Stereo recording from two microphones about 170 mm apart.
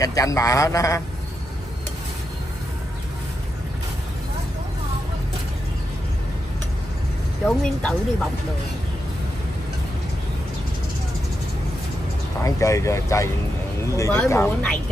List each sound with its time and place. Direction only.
0.0 s a man's voice: 20° left (ahead or behind)
7.4 s speech: 5° left (ahead or behind)
12.4 s speech: 20° left (ahead or behind)